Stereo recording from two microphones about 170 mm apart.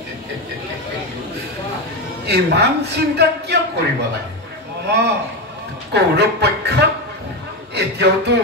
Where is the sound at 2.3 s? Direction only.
75° right (ahead or behind).